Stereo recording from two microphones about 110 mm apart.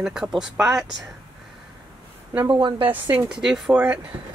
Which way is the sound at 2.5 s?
50° right (ahead or behind).